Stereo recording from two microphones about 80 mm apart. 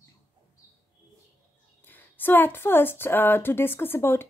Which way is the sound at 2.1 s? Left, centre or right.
Left.